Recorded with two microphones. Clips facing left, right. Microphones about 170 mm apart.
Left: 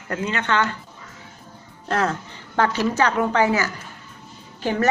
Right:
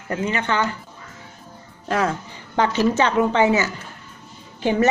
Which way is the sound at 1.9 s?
10° right (ahead or behind).